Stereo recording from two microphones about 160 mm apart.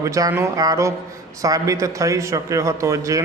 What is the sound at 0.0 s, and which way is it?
A man's voice, 20° right (ahead or behind).